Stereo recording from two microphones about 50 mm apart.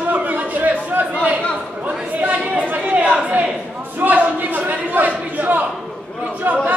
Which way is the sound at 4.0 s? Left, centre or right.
Right.